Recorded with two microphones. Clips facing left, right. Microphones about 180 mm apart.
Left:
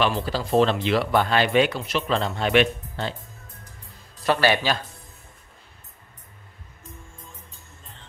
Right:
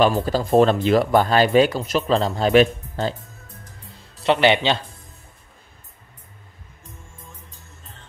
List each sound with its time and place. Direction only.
0.0 s speech: 45° right (ahead or behind)
4.2 s speech: 20° right (ahead or behind)